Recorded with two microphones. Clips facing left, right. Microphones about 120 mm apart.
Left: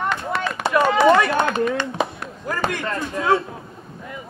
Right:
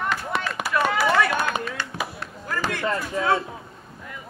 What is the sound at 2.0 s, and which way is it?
Chop, 25° left (ahead or behind).